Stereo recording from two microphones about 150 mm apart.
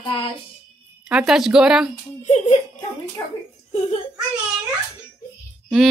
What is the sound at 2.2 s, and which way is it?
Speech, 50° left (ahead or behind).